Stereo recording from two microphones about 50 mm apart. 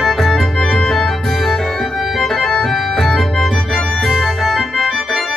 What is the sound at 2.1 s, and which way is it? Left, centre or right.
Organ, centre.